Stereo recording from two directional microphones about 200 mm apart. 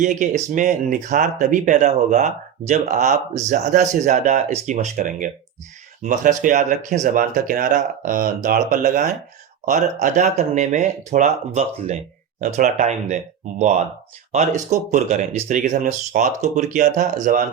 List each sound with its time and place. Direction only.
0.0 s speech: 40° right (ahead or behind)